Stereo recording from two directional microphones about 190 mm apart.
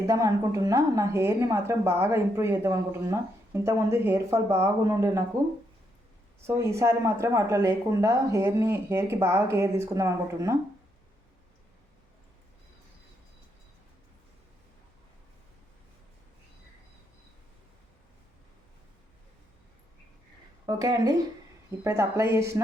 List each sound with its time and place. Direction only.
0.1 s a woman's voice: 15° right (ahead or behind)
6.5 s a woman's voice: 15° right (ahead or behind)
20.7 s a woman's voice: 20° right (ahead or behind)